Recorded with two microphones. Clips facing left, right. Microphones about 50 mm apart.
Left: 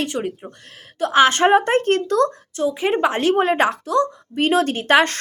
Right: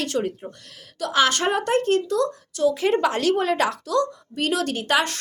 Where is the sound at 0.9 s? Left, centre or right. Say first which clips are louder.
Left 6 dB; left.